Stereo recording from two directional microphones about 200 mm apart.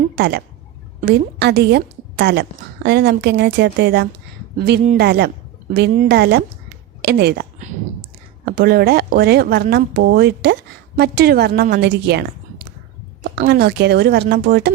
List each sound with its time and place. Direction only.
0.2 s a woman's voice: 55° right (ahead or behind)
8.4 s a woman's voice: 50° right (ahead or behind)